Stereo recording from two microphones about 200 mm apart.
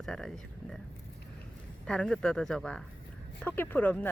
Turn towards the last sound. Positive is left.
turn(degrees=10)  # may be behind; listen again after turning